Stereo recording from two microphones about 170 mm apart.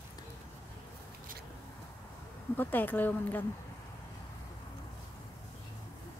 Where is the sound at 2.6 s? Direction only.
10° left (ahead or behind).